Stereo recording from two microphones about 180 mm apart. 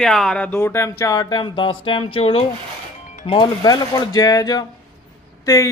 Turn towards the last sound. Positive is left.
turn(degrees=15)  # may be behind; listen again after turning